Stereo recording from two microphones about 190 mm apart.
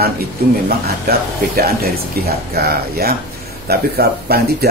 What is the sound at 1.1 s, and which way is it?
Speech, 55° right (ahead or behind).